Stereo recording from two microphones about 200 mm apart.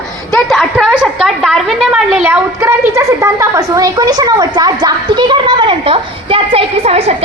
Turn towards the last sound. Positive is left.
turn(degrees=-30)  # may be behind; listen again after turning